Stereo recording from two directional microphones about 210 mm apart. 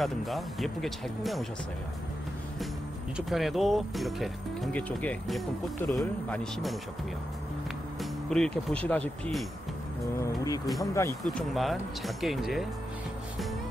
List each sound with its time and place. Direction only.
0.0 s speech: centre (ahead or behind)
3.2 s speech: centre (ahead or behind)
8.0 s speech: centre (ahead or behind)
10.2 s speech: 15° left (ahead or behind)
11.2 s speech: centre (ahead or behind)